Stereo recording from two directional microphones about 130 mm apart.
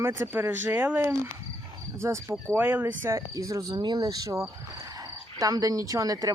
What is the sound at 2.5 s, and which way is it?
Speech, 15° right (ahead or behind).